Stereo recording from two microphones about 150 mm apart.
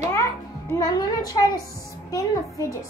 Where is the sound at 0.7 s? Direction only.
25° left (ahead or behind).